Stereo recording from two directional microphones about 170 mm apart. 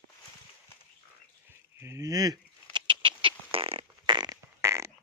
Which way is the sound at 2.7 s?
30° right (ahead or behind).